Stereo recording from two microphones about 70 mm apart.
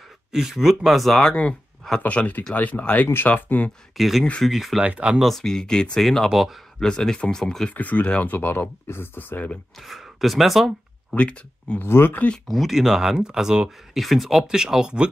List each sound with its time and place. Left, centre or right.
0.3 s speech: centre
1.3 s speech: centre
3.9 s speech: centre
4.8 s speech: centre
5.2 s speech: centre
6.8 s speech: centre
9.8 s speech: centre
11.1 s speech: centre
11.8 s speech: left
12.4 s speech: centre